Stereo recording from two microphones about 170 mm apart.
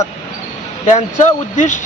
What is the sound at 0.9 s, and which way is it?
Speech, 45° left (ahead or behind).